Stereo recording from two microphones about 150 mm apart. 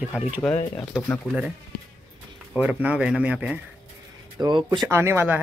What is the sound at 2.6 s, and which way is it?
Speech, 10° right (ahead or behind).